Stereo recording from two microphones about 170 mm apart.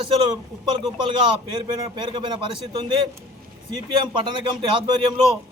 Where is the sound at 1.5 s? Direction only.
25° right (ahead or behind).